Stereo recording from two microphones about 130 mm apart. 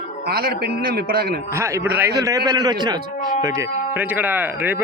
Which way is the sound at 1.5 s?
20° right (ahead or behind).